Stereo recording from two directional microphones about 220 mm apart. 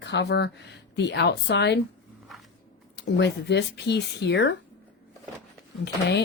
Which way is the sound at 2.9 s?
50° left (ahead or behind).